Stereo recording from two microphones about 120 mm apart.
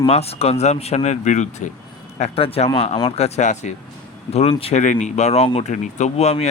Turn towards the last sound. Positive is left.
turn(degrees=65)  # may be behind; listen again after turning